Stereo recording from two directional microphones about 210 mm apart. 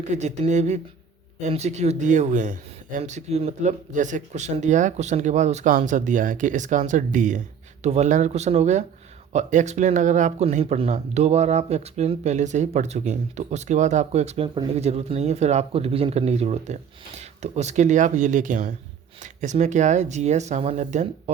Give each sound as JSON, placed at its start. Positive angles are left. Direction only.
{"t": 0.1, "sound": "speech", "side_deg": -35}